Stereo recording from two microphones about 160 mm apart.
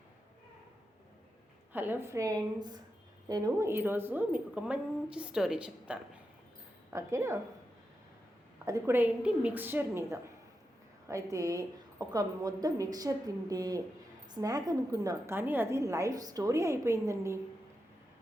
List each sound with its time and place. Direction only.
1.7 s a woman's voice: 10° right (ahead or behind)
6.9 s a woman's voice: 20° right (ahead or behind)
8.6 s a woman's voice: 15° right (ahead or behind)